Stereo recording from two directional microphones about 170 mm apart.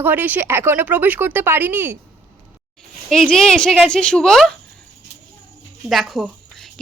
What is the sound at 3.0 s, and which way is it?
A woman's voice, 5° left (ahead or behind).